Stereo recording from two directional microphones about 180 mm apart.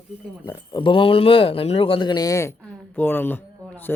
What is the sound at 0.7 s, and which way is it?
A woman's voice, 30° left (ahead or behind).